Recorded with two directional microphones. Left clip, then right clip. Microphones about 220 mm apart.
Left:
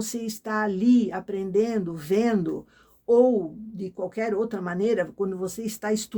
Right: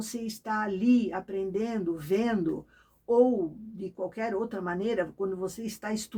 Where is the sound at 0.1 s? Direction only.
40° left (ahead or behind).